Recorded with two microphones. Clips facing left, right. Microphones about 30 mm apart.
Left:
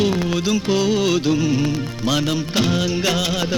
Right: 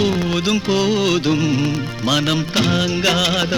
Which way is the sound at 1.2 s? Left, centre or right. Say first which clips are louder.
Right 1 dB; right.